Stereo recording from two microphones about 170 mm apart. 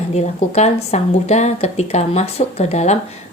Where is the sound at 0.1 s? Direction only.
40° left (ahead or behind).